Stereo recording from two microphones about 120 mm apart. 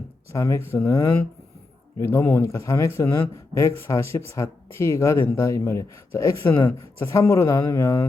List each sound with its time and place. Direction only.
0.3 s a man's voice: 25° left (ahead or behind)